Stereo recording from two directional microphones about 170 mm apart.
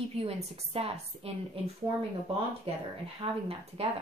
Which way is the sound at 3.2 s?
35° right (ahead or behind).